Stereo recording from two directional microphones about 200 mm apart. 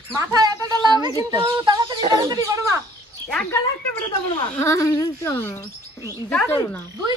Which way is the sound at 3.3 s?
5° left (ahead or behind).